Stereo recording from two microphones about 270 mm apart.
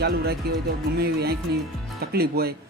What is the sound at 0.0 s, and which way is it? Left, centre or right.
Speech, right.